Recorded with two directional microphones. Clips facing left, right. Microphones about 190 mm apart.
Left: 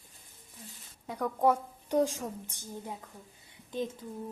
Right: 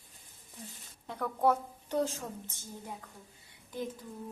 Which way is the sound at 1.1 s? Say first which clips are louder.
Left 2 dB; 10° left (ahead or behind).